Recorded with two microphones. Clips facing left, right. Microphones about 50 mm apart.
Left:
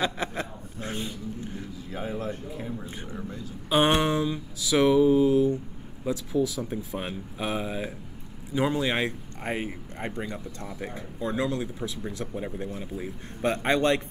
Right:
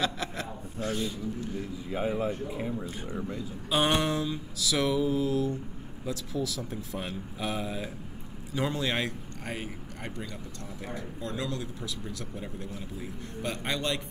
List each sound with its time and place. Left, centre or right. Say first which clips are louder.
0.0 s a man's voice: left 3 dB; left
1.9 s speech: right 3 dB; centre
3.7 s a man's voice: left 4 dB; left